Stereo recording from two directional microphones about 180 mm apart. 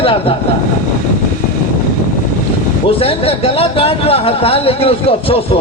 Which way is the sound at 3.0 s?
30° left (ahead or behind).